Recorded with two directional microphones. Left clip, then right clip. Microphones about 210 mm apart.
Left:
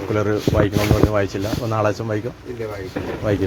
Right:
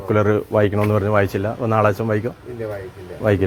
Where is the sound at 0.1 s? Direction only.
40° right (ahead or behind).